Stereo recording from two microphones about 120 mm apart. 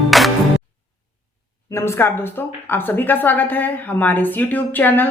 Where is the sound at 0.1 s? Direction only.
Centre (ahead or behind).